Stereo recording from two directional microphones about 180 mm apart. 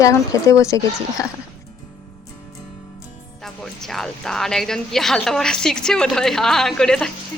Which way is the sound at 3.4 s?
Centre (ahead or behind).